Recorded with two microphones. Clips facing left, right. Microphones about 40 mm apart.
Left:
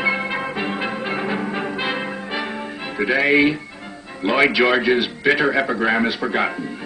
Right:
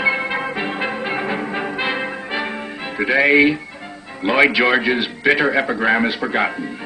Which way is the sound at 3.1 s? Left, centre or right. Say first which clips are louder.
Right 3 dB; right.